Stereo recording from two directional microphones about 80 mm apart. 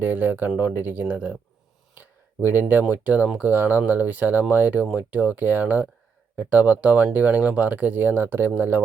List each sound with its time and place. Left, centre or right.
0.0 s speech: right
2.0 s a sound: right
2.9 s speech: right